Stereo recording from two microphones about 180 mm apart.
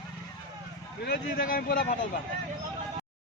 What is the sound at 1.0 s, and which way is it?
Speech, 60° left (ahead or behind).